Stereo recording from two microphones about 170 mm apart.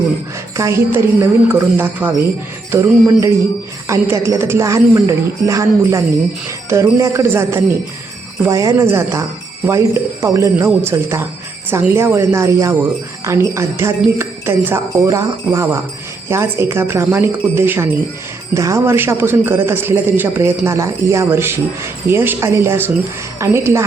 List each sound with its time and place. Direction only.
0.5 s speech: 15° right (ahead or behind)